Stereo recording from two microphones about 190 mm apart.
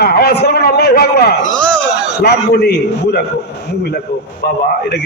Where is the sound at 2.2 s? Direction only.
60° left (ahead or behind).